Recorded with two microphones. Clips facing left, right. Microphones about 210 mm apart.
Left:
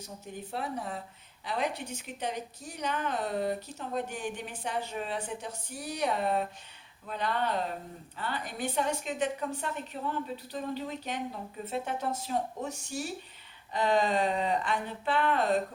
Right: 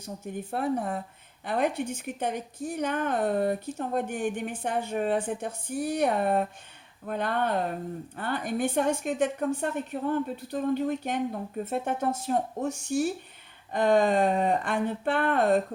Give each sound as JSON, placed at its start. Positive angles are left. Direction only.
{"t": 0.0, "sound": "a woman's voice", "side_deg": -55}